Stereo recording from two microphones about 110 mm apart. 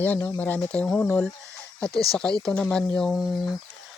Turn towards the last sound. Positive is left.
turn(degrees=0)  # may be behind; listen again after turning